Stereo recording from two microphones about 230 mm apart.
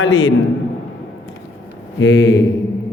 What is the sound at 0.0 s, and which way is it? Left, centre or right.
Speech, left.